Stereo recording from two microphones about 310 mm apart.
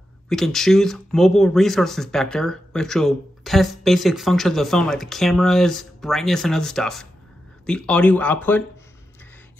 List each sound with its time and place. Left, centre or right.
0.3 s speech: centre